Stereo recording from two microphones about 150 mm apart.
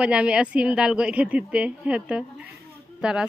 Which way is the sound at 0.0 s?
5° right (ahead or behind).